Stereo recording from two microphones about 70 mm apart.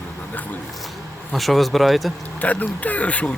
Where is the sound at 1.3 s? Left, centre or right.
Centre.